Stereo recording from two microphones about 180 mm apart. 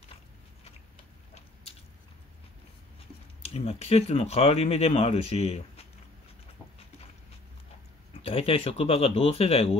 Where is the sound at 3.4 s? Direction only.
35° left (ahead or behind).